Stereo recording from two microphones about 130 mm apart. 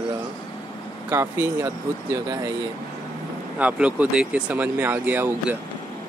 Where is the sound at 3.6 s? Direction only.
10° right (ahead or behind).